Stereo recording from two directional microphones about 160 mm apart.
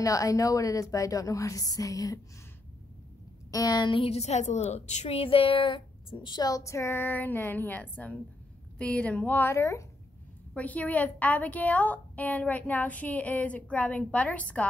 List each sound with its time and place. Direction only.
0.0 s a woman's voice: 20° left (ahead or behind)
3.5 s a woman's voice: 25° left (ahead or behind); by 14.4 s 10° left (ahead or behind)